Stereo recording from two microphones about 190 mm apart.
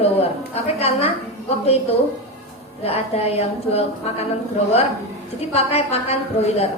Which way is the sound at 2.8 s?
30° left (ahead or behind).